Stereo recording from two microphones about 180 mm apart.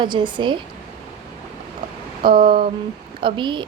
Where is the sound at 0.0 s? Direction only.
25° right (ahead or behind).